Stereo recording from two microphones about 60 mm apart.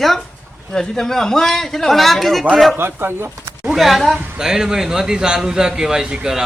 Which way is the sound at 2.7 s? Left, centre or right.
Right.